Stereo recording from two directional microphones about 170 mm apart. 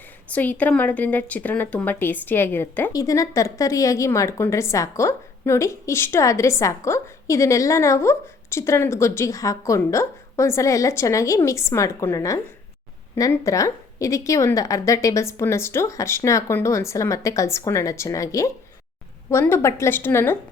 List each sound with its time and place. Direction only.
0.3 s a woman's voice: 10° left (ahead or behind)